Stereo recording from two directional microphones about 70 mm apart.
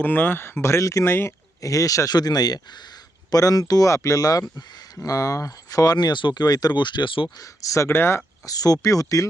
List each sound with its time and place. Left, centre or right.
0.0 s speech: left
1.0 s speech: left
1.6 s speech: left
3.3 s speech: left
7.4 s speech: left
7.9 s speech: left
8.4 s speech: left